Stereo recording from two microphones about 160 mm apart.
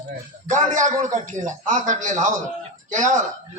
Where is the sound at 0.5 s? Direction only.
50° right (ahead or behind).